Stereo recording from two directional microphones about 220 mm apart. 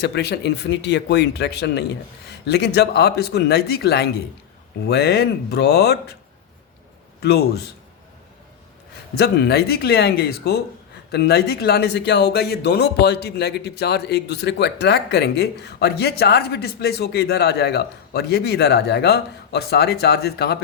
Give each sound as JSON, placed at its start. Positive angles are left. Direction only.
{"t": 0.0, "sound": "speech", "side_deg": 50}
{"t": 7.2, "sound": "speech", "side_deg": 50}
{"t": 9.1, "sound": "speech", "side_deg": 50}